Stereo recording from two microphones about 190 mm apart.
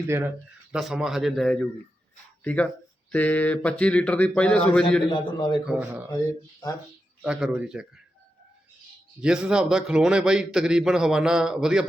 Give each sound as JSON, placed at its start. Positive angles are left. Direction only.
{"t": 0.1, "sound": "speech", "side_deg": -10}
{"t": 0.7, "sound": "a man's voice", "side_deg": 0}
{"t": 5.0, "sound": "a man's voice", "side_deg": 25}
{"t": 5.6, "sound": "a man's voice", "side_deg": -5}
{"t": 7.2, "sound": "a man's voice", "side_deg": -5}
{"t": 9.2, "sound": "a man's voice", "side_deg": -5}